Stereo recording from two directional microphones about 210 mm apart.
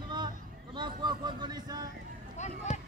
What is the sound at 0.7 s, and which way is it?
Speech, 20° right (ahead or behind).